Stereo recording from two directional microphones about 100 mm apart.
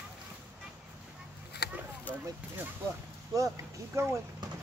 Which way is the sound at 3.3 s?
30° right (ahead or behind).